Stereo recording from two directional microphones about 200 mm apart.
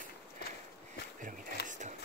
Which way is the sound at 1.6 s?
40° right (ahead or behind).